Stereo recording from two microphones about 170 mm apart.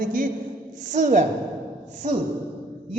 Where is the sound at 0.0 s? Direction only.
50° right (ahead or behind).